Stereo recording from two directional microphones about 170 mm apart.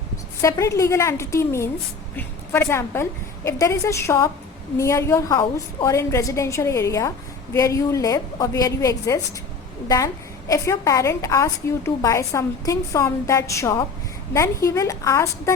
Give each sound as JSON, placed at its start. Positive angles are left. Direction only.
{"t": 0.4, "sound": "a woman's voice", "side_deg": 20}
{"t": 10.5, "sound": "a woman's voice", "side_deg": 20}